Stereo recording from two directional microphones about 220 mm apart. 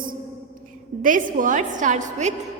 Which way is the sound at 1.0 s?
35° right (ahead or behind).